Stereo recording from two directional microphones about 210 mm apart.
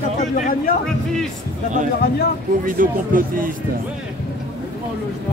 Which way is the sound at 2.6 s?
40° right (ahead or behind).